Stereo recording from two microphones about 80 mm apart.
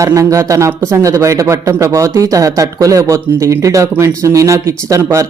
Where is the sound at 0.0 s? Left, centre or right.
Right.